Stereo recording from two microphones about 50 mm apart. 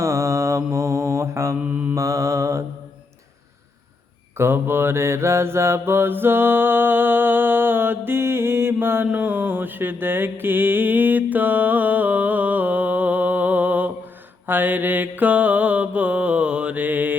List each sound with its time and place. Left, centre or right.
0.0 s mantra: right
2.0 s mantra: right
4.4 s mantra: right